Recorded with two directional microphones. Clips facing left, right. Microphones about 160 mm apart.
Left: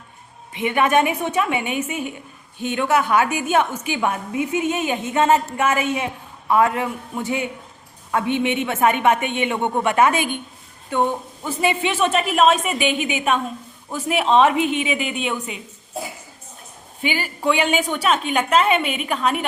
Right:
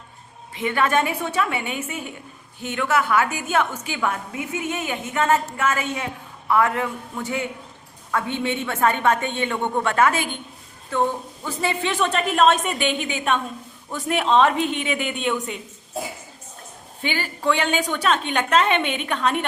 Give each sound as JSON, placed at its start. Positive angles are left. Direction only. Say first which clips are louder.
{"t": 0.5, "sound": "a woman's voice", "louder": "left 3 dB", "side_deg": 20}
{"t": 2.6, "sound": "a woman's voice", "louder": "left 3 dB", "side_deg": 25}
{"t": 17.0, "sound": "a woman's voice", "louder": "left 2 dB", "side_deg": 10}